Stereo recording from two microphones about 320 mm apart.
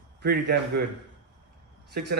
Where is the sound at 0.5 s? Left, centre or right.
Right.